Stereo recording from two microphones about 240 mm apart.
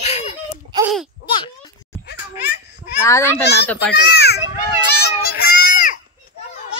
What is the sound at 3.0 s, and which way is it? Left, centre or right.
Speech, centre.